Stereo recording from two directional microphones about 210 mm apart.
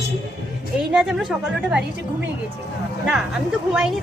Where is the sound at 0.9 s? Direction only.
Centre (ahead or behind).